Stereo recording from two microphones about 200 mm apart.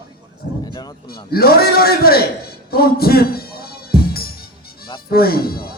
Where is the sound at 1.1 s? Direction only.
50° left (ahead or behind).